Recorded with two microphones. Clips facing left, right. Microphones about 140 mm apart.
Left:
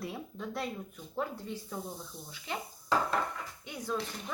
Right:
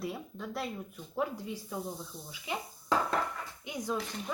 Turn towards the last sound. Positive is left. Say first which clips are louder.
# right 1 dB
turn(degrees=-15)  # may be behind; listen again after turning